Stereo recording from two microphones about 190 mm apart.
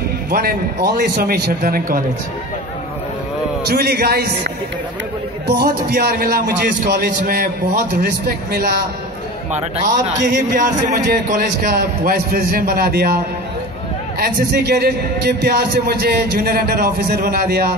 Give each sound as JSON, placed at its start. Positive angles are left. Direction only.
{"t": 0.3, "sound": "a man's voice", "side_deg": -50}
{"t": 3.6, "sound": "a man's voice", "side_deg": -55}
{"t": 5.5, "sound": "a man's voice", "side_deg": -60}
{"t": 9.5, "sound": "a man's voice", "side_deg": -35}
{"t": 14.2, "sound": "a man's voice", "side_deg": -55}